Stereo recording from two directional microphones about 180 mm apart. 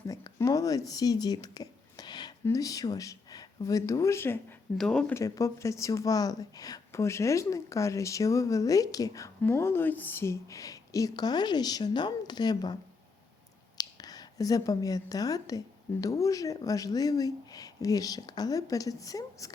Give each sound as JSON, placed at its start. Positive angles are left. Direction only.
{"t": 0.1, "sound": "speech", "side_deg": 20}
{"t": 5.1, "sound": "speech", "side_deg": 20}
{"t": 13.7, "sound": "speech", "side_deg": 20}